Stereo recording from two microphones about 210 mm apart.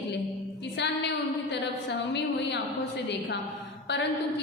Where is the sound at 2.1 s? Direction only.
55° left (ahead or behind).